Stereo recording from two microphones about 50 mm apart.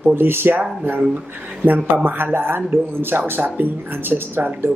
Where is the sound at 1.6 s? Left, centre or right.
Right.